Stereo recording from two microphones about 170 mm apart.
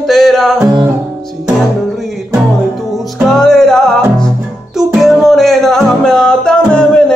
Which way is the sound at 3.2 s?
5° left (ahead or behind).